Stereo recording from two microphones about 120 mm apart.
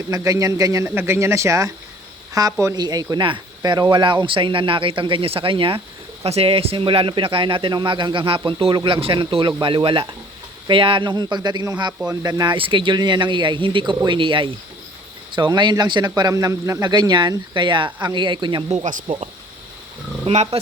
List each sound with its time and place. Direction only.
0.1 s a man's voice: 30° right (ahead or behind); by 5.8 s 45° right (ahead or behind)
6.2 s speech: 55° right (ahead or behind); by 12.5 s 30° right (ahead or behind)
12.5 s speech: 45° right (ahead or behind)
20.2 s speech: 60° right (ahead or behind)